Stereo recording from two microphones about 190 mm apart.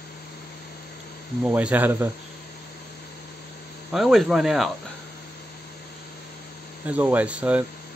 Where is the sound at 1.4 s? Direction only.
10° right (ahead or behind).